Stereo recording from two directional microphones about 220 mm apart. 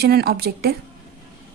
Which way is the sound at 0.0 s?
45° right (ahead or behind).